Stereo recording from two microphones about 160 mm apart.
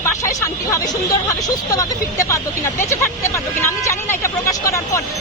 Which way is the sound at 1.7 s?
20° left (ahead or behind).